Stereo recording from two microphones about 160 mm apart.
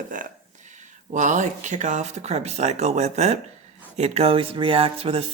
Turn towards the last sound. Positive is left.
turn(degrees=-35)  # may be behind; listen again after turning